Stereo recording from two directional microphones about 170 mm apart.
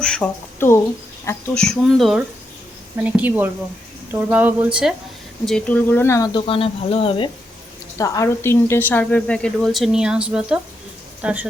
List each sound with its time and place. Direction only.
0.0 s speech: 5° left (ahead or behind)
1.6 s speech: centre (ahead or behind)
3.0 s speech: 10° right (ahead or behind)
5.5 s speech: 5° left (ahead or behind)
6.5 s speech: 35° left (ahead or behind)
7.9 s speech: 20° left (ahead or behind); by 11.4 s 10° right (ahead or behind)